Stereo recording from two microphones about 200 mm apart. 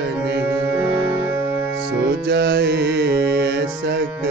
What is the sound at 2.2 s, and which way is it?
Music, 55° right (ahead or behind).